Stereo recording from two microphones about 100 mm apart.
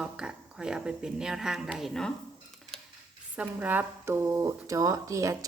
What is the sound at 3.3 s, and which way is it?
Speech, 15° right (ahead or behind).